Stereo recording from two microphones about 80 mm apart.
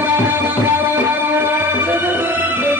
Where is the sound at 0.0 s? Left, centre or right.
Right.